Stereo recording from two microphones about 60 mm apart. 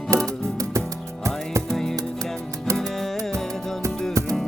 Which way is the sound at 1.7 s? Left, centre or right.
Centre.